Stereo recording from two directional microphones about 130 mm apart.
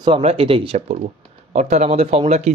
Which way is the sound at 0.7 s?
55° right (ahead or behind).